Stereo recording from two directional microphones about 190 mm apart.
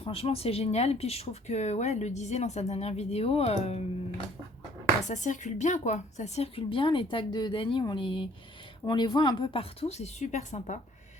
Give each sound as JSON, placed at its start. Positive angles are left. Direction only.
{"t": 0.0, "sound": "speech", "side_deg": 30}
{"t": 5.0, "sound": "a woman's voice", "side_deg": 40}